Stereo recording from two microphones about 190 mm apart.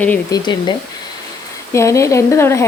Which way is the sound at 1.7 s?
15° left (ahead or behind).